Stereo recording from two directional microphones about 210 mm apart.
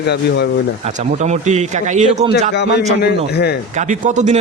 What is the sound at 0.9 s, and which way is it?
Speech, 35° right (ahead or behind).